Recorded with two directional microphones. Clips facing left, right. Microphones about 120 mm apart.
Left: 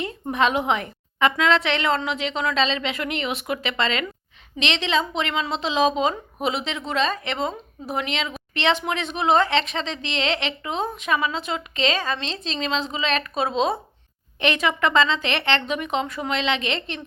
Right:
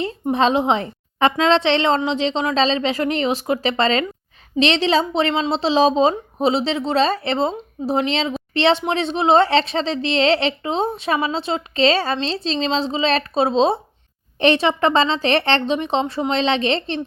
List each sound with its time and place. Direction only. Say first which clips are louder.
0.0 s a woman's voice: right 4 dB; 30° right (ahead or behind)